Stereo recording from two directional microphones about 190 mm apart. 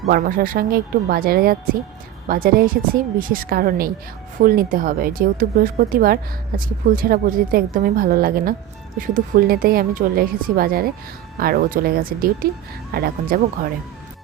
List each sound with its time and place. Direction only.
0.1 s a woman's voice: 50° right (ahead or behind)